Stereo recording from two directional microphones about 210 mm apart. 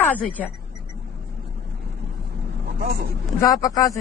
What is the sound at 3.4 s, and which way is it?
Speech, 15° left (ahead or behind).